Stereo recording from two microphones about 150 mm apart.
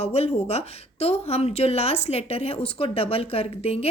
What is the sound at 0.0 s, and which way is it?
Speech, 45° left (ahead or behind).